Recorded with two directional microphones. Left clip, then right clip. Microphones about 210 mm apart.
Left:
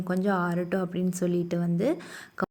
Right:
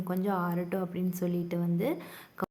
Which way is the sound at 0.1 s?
25° left (ahead or behind).